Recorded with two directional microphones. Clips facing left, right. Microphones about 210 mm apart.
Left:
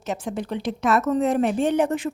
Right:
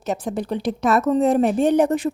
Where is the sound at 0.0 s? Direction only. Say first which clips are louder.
Right 3 dB; 35° right (ahead or behind).